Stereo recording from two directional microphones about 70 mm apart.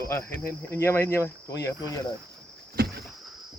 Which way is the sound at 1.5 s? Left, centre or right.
Left.